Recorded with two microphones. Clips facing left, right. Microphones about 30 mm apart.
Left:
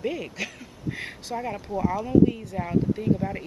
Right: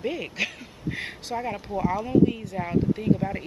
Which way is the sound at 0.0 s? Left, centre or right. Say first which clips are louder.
Right 2 dB; centre.